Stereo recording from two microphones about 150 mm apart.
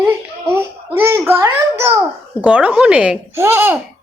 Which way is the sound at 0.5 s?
15° right (ahead or behind).